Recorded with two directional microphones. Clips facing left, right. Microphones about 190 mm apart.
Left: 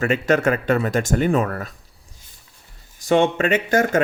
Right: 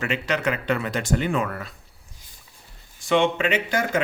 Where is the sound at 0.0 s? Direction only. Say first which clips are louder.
Left 7 dB; 45° left (ahead or behind).